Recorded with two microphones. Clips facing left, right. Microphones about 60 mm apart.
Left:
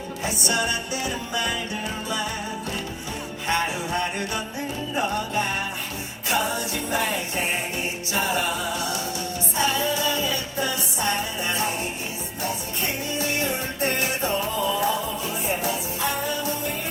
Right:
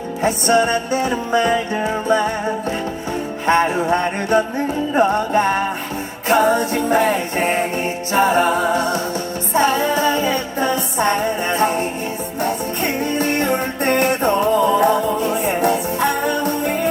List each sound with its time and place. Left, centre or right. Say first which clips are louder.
0.2 s music: right 10 dB; right
3.4 s music: right 9 dB; right